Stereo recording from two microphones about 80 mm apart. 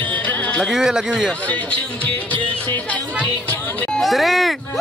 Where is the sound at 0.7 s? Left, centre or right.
Centre.